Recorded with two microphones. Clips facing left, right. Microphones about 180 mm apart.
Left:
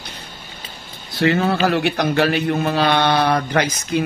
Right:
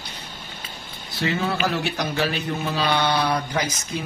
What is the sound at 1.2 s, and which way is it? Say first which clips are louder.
Speech: left 7 dB; 60° left (ahead or behind).